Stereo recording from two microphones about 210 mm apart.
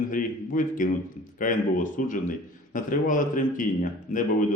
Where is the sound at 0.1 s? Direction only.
40° left (ahead or behind).